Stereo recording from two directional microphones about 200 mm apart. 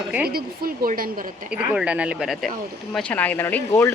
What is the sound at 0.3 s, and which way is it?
Speech, 50° right (ahead or behind).